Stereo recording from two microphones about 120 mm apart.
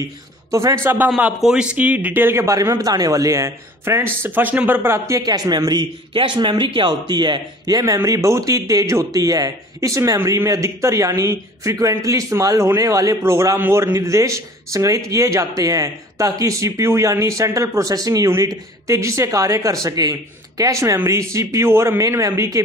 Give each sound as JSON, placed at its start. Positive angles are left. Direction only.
{"t": 0.5, "sound": "a man's voice", "side_deg": -25}
{"t": 0.8, "sound": "a man's voice", "side_deg": -15}